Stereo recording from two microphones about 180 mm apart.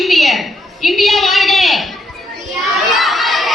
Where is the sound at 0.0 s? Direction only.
Centre (ahead or behind).